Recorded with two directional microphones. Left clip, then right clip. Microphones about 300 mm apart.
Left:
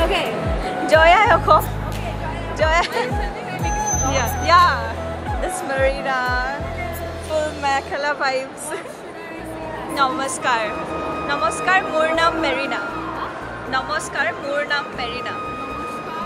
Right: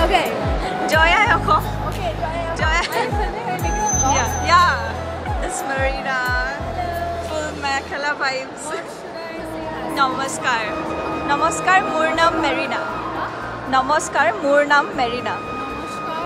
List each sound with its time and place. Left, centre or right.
0.8 s music: centre
2.6 s speech: centre
4.1 s speech: centre
9.9 s speech: centre; by 15.0 s right